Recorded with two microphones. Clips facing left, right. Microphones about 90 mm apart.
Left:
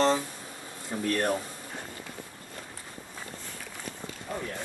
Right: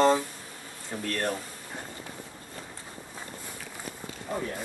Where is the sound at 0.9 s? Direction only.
20° left (ahead or behind).